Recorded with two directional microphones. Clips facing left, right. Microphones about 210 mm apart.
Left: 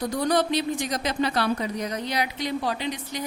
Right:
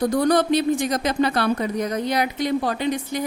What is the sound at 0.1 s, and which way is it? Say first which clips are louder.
Speech: right 5 dB; 50° right (ahead or behind).